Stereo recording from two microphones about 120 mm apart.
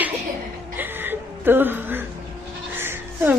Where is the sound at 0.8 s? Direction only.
15° right (ahead or behind).